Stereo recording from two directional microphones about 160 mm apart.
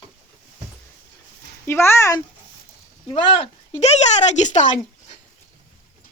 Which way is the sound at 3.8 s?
45° left (ahead or behind).